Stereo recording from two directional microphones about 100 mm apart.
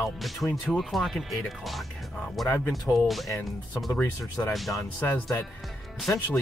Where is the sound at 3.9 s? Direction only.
20° left (ahead or behind).